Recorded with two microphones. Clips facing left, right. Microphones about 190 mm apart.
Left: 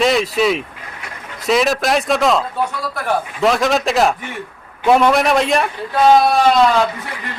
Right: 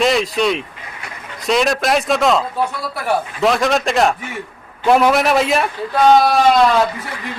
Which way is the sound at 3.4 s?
Centre (ahead or behind).